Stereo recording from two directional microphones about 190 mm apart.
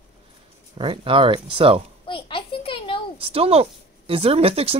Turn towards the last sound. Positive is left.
turn(degrees=-30)  # may be behind; listen again after turning